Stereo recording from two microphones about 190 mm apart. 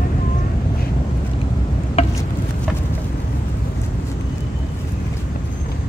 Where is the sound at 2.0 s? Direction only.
30° left (ahead or behind).